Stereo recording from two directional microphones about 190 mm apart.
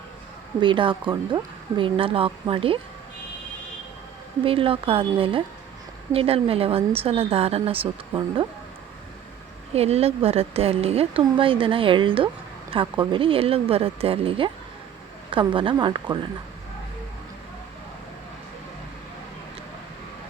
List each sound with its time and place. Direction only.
0.6 s a woman's voice: 25° right (ahead or behind)
4.4 s a woman's voice: 30° right (ahead or behind)
9.7 s a woman's voice: 35° right (ahead or behind)